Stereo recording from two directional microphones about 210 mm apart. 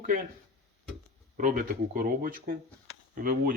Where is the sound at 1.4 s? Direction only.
40° right (ahead or behind).